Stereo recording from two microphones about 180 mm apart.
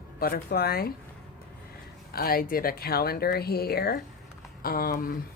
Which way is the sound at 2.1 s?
55° left (ahead or behind).